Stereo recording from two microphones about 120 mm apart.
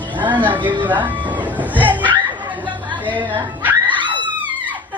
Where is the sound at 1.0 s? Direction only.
15° right (ahead or behind).